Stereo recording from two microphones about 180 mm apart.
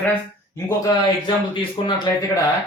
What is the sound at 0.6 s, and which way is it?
Speech, 20° left (ahead or behind).